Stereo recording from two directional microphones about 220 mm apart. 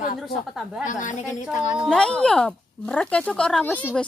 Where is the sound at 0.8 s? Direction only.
35° left (ahead or behind).